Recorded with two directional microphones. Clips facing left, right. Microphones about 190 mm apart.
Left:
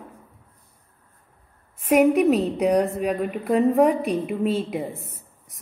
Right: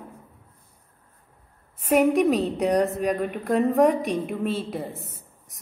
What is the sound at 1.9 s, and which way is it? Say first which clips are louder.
A woman's voice: left 2 dB; 10° left (ahead or behind).